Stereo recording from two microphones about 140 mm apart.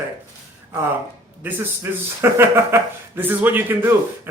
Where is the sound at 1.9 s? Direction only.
15° right (ahead or behind).